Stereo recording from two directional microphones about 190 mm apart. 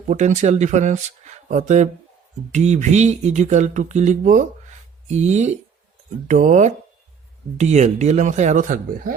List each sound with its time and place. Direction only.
0.1 s speech: 40° right (ahead or behind)